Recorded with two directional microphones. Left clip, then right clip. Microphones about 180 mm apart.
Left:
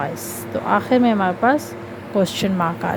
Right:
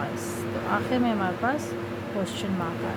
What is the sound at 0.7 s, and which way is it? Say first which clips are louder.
Speech: left 10 dB; 45° left (ahead or behind).